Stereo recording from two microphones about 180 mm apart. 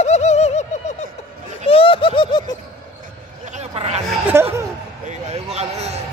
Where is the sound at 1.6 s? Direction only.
30° left (ahead or behind).